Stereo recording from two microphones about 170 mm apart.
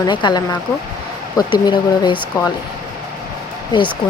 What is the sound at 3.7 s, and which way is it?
Speech, 30° left (ahead or behind).